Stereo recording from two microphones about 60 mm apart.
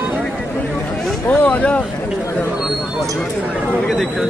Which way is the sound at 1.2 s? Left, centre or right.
Left.